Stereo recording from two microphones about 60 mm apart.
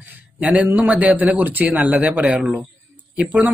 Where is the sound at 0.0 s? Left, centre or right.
Right.